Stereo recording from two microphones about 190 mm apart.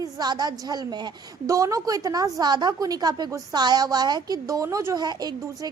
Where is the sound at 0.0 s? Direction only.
20° right (ahead or behind).